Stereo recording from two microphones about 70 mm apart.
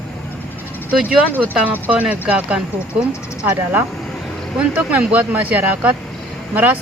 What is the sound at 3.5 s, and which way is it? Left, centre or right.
Speech, right.